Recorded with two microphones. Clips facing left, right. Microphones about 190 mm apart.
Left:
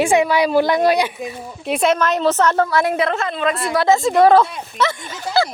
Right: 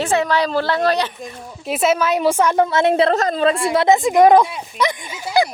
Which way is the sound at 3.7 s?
20° right (ahead or behind).